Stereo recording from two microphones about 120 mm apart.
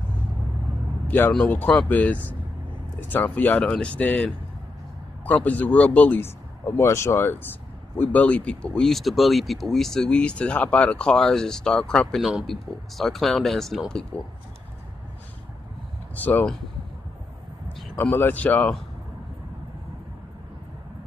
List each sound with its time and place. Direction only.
1.0 s vehicle: 15° left (ahead or behind)
1.3 s speech: 10° left (ahead or behind)
16.2 s speech: 15° left (ahead or behind)
17.9 s speech: 15° left (ahead or behind)